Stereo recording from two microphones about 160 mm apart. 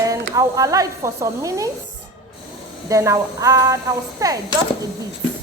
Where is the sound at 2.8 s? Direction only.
20° right (ahead or behind).